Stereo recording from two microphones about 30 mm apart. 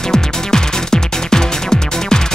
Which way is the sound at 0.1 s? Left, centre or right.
Centre.